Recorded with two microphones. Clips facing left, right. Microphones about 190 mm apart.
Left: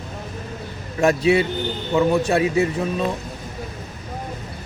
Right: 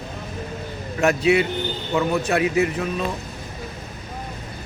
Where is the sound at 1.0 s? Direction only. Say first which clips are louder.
Left 1 dB; 35° left (ahead or behind).